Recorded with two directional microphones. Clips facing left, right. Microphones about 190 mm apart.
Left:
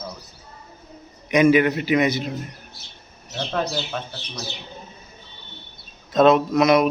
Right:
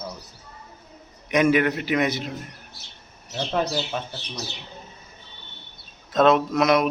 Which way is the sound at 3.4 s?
10° right (ahead or behind).